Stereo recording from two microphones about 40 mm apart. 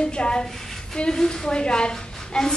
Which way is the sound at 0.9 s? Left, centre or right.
Centre.